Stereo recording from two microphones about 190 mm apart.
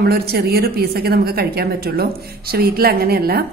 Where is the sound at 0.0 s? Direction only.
55° right (ahead or behind).